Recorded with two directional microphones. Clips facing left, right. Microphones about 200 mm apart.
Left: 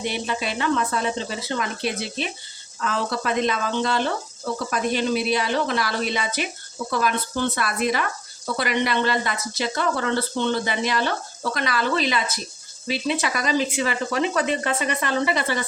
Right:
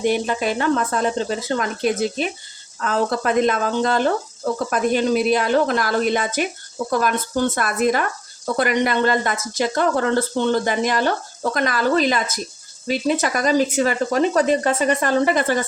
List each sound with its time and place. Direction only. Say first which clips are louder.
0.0 s speech: right 7 dB; 45° right (ahead or behind)